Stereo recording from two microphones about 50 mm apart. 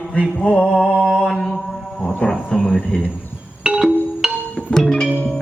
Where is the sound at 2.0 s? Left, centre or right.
Left.